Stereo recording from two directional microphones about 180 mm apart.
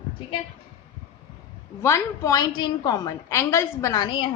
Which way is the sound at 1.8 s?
15° left (ahead or behind).